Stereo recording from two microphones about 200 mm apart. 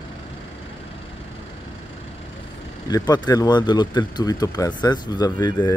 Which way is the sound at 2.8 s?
20° left (ahead or behind).